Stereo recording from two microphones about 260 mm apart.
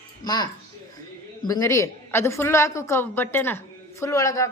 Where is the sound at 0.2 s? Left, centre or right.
Left.